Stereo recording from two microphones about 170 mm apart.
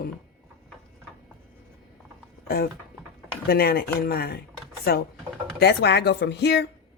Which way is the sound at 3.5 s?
65° left (ahead or behind).